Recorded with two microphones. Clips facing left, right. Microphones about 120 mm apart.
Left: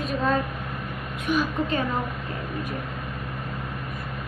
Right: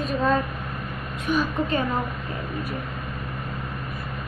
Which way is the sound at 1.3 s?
Centre (ahead or behind).